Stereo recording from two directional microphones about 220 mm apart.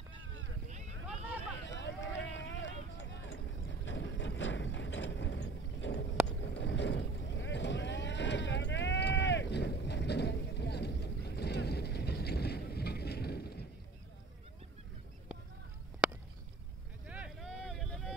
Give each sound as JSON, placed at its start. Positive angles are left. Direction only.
{"t": 1.7, "sound": "run", "side_deg": 55}
{"t": 17.1, "sound": "vehicle", "side_deg": -5}